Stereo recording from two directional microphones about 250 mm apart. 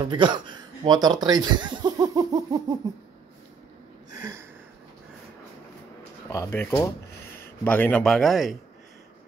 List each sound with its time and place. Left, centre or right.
0.1 s speech: centre
4.1 s a sound: centre
6.3 s speech: centre